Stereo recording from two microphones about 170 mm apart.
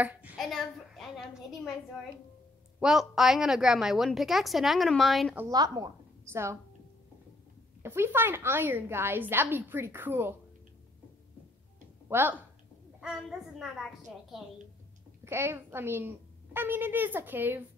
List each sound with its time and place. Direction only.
0.0 s a sound: 10° right (ahead or behind)
2.8 s a woman's voice: centre (ahead or behind)
5.5 s a woman's voice: 25° right (ahead or behind)
7.8 s a woman's voice: 15° right (ahead or behind)
12.1 s a woman's voice: 10° right (ahead or behind)
15.2 s a woman's voice: 15° right (ahead or behind)